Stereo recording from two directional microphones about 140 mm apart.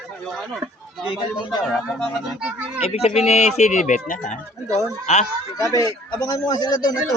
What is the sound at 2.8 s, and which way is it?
Speech, 45° left (ahead or behind).